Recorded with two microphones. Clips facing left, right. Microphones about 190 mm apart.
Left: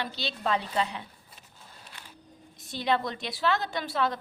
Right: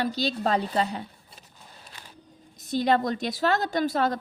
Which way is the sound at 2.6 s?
40° right (ahead or behind).